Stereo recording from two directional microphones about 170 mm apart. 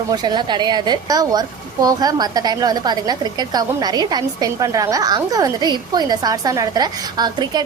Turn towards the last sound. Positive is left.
turn(degrees=-25)  # may be behind; listen again after turning